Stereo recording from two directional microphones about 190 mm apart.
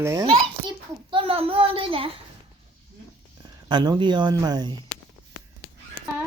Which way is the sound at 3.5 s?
20° right (ahead or behind).